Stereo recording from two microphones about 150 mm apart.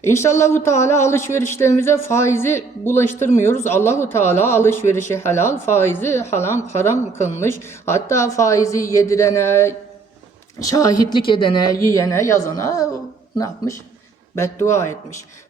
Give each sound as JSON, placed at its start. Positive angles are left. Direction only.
{"t": 0.0, "sound": "a man's voice", "side_deg": 20}
{"t": 11.9, "sound": "speech", "side_deg": 20}
{"t": 14.3, "sound": "a man's voice", "side_deg": 15}